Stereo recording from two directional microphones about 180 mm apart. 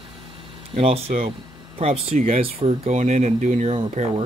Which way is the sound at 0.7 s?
35° right (ahead or behind).